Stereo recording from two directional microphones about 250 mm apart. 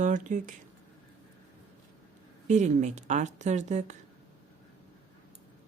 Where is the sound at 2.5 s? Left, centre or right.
Right.